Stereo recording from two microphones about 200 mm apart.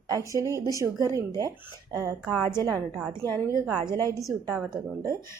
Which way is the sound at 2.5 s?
20° right (ahead or behind).